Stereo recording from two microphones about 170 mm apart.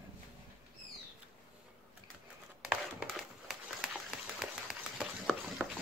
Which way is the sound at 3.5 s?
Centre (ahead or behind).